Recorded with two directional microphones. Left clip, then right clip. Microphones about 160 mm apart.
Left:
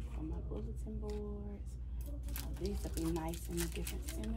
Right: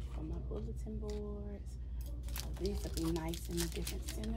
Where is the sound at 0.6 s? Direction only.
10° right (ahead or behind).